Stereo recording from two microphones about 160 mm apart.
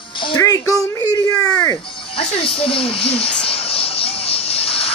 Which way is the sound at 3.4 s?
35° left (ahead or behind).